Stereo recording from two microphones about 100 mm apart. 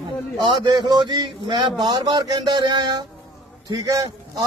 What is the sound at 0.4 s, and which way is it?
A man's voice, 45° right (ahead or behind).